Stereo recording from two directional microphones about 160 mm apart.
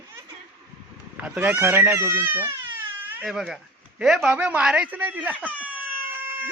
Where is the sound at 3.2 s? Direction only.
Centre (ahead or behind).